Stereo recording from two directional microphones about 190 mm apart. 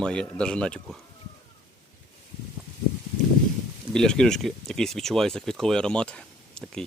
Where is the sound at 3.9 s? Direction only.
5° left (ahead or behind).